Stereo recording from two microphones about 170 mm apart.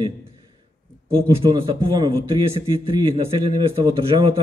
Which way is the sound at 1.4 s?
25° right (ahead or behind).